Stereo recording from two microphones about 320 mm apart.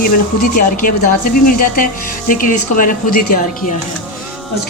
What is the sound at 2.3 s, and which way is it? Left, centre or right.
Speech, left.